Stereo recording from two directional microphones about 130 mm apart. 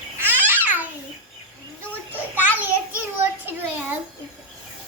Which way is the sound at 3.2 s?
15° right (ahead or behind).